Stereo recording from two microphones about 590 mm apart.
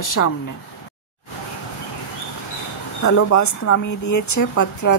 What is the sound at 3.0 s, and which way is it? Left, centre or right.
Speech, left.